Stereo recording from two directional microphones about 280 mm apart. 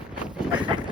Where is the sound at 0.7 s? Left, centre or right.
Centre.